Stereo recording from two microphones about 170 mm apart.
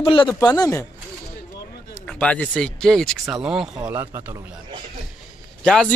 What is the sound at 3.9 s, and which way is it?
Speech, 15° right (ahead or behind).